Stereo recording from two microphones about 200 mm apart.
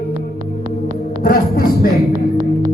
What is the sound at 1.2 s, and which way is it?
Music, 45° left (ahead or behind).